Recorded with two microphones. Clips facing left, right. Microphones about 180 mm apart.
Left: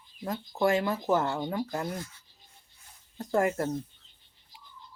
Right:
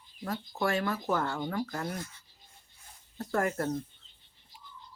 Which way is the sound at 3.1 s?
15° left (ahead or behind).